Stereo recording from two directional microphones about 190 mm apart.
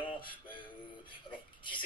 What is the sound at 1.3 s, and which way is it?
Speech, 25° left (ahead or behind).